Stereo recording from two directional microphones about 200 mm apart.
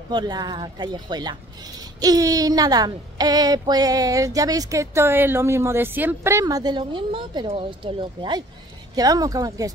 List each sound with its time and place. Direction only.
0.1 s speech: 20° right (ahead or behind)